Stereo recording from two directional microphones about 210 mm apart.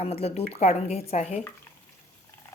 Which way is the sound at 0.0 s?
30° left (ahead or behind).